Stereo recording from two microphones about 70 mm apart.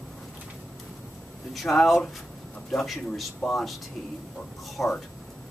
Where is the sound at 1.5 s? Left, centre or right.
Centre.